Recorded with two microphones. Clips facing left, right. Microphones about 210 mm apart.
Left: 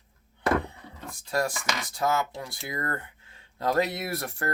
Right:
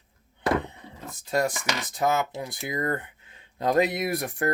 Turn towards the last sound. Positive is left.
turn(degrees=-15)  # may be behind; listen again after turning